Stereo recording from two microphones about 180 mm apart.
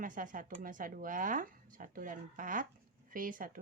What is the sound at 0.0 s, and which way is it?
Speech, 45° right (ahead or behind).